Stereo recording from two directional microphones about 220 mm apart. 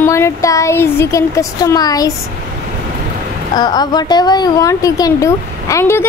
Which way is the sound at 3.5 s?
20° left (ahead or behind).